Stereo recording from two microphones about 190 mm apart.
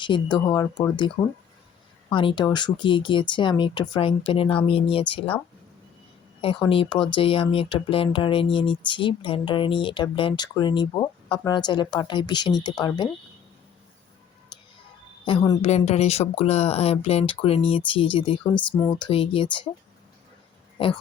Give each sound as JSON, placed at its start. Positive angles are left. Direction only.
{"t": 0.0, "sound": "speech", "side_deg": 25}
{"t": 6.4, "sound": "speech", "side_deg": 30}
{"t": 14.5, "sound": "music", "side_deg": 25}
{"t": 15.2, "sound": "speech", "side_deg": 25}